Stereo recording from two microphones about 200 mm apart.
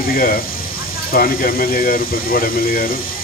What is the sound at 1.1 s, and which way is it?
Speech, 45° left (ahead or behind).